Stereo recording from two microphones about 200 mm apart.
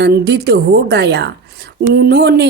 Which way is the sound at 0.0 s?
55° right (ahead or behind).